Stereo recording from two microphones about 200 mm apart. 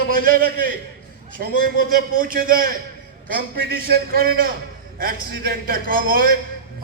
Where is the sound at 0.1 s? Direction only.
45° right (ahead or behind).